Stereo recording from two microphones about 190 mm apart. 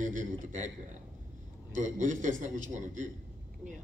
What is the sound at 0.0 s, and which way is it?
Speech, 40° right (ahead or behind).